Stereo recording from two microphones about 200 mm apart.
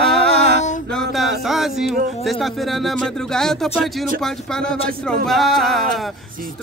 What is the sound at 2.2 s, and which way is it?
Speech, centre (ahead or behind).